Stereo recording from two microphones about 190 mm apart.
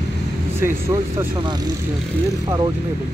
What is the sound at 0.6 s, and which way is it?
Speech, 15° right (ahead or behind).